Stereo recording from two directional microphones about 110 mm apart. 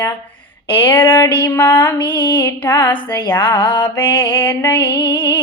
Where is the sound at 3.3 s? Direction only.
20° left (ahead or behind).